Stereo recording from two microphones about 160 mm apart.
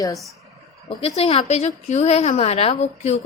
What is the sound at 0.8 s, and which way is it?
A woman's voice, 40° left (ahead or behind).